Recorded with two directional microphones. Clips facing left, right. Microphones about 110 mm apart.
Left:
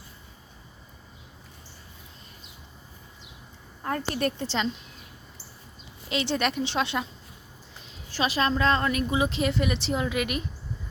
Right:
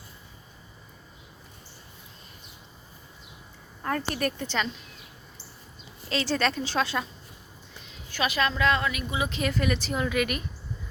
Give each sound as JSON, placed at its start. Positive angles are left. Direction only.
{"t": 3.8, "sound": "a woman's voice", "side_deg": 30}
{"t": 6.1, "sound": "a woman's voice", "side_deg": 20}
{"t": 8.1, "sound": "a woman's voice", "side_deg": 35}